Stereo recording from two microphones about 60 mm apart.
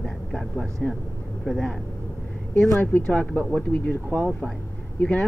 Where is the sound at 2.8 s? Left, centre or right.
Left.